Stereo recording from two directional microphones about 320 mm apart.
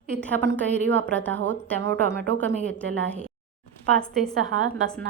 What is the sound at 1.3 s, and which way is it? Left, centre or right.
Speech, right.